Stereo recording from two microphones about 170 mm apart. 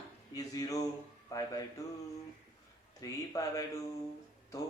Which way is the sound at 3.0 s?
20° left (ahead or behind).